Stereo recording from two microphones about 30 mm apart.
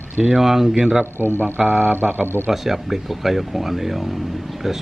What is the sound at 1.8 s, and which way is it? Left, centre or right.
Speech, right.